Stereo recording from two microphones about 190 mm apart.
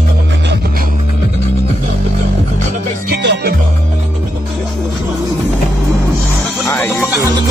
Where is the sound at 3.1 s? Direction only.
60° right (ahead or behind).